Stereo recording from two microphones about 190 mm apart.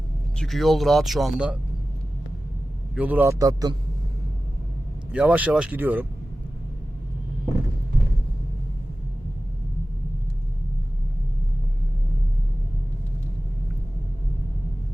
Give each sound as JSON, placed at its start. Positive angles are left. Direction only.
{"t": 0.3, "sound": "speech", "side_deg": 0}
{"t": 2.9, "sound": "speech", "side_deg": -10}
{"t": 5.1, "sound": "speech", "side_deg": -5}